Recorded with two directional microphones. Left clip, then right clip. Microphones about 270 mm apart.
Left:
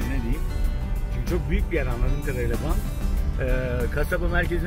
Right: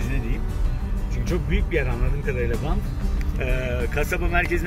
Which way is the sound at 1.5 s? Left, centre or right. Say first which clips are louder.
Right 4 dB; centre.